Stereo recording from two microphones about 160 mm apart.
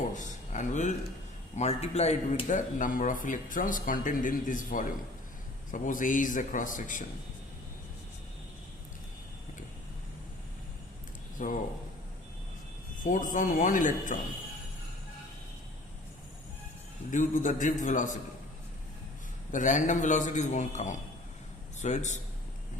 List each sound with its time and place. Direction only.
0.1 s a sound: 50° left (ahead or behind)
1.5 s a man's voice: 45° left (ahead or behind)
2.5 s speech: 55° left (ahead or behind)
11.4 s a man's voice: 50° left (ahead or behind)
13.0 s speech: 55° left (ahead or behind)
17.1 s a man's voice: 55° left (ahead or behind)
19.5 s a man's voice: 50° left (ahead or behind)